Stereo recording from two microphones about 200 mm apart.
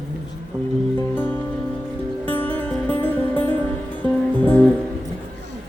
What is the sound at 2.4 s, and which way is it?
Music, 10° left (ahead or behind).